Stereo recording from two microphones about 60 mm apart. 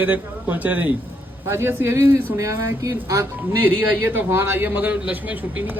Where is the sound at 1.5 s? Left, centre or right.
Right.